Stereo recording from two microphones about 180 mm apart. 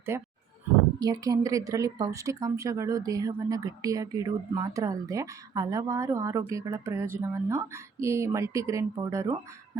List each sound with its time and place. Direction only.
0.1 s a woman's voice: 15° right (ahead or behind)